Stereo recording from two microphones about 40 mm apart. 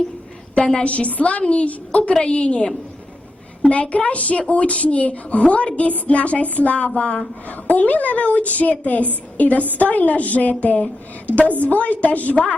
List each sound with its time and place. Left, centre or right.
0.6 s a woman's voice: left
0.9 s a woman's voice: left
7.4 s a woman's voice: left
11.4 s a woman's voice: right
11.7 s a woman's voice: left